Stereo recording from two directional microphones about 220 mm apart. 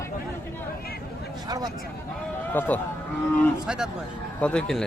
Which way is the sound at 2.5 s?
10° left (ahead or behind).